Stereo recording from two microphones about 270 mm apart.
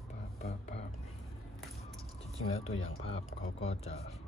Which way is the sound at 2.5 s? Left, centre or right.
Left.